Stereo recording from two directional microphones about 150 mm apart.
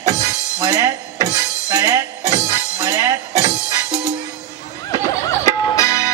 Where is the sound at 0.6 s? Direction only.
20° right (ahead or behind).